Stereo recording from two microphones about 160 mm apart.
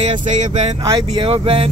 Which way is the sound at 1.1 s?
35° right (ahead or behind).